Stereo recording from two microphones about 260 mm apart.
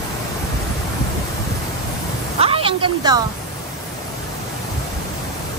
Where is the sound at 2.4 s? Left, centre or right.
Right.